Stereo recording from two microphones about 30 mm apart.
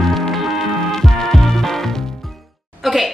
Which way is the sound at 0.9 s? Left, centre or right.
Centre.